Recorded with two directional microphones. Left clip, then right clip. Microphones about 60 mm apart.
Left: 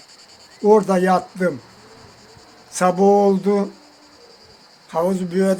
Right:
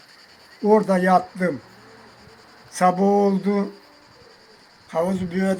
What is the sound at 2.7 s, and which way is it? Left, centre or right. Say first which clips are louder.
Speech: left 3 dB; centre.